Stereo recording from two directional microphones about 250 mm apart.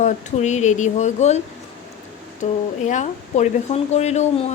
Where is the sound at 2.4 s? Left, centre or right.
Left.